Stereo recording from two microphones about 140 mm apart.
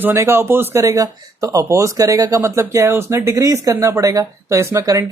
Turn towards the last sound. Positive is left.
turn(degrees=-25)  # may be behind; listen again after turning